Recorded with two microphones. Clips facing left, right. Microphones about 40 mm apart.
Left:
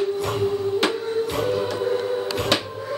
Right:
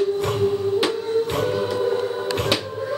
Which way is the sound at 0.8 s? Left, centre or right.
Centre.